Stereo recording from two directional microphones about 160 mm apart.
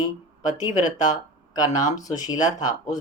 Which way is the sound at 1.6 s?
25° left (ahead or behind).